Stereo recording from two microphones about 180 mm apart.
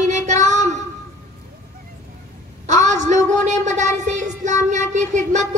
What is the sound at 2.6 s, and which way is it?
A woman's voice, 40° right (ahead or behind).